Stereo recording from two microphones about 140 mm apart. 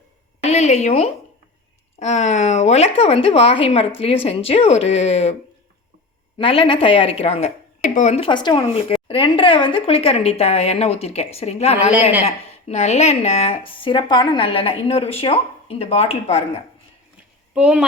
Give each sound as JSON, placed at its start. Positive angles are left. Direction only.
{"t": 0.4, "sound": "a sound", "side_deg": 50}
{"t": 2.0, "sound": "speech", "side_deg": 55}
{"t": 6.4, "sound": "a woman's voice", "side_deg": 40}
{"t": 8.3, "sound": "a woman's voice", "side_deg": 35}
{"t": 17.5, "sound": "speech", "side_deg": -5}